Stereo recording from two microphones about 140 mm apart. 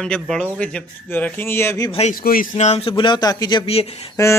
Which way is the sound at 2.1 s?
90° left.